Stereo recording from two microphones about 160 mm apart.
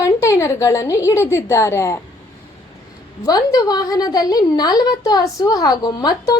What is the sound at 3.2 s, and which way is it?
A woman's voice, 25° left (ahead or behind).